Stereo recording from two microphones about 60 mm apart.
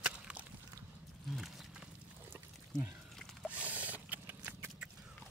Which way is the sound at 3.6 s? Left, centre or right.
Right.